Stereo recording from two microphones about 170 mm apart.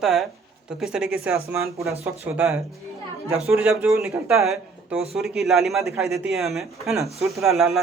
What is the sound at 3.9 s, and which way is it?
Speech, 15° right (ahead or behind).